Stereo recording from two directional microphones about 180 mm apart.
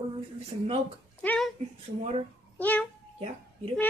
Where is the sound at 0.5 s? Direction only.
30° right (ahead or behind).